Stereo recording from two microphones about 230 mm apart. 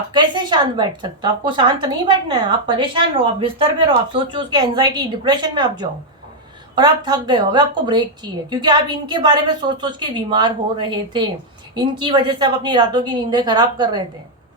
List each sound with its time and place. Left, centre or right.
0.1 s a woman's voice: centre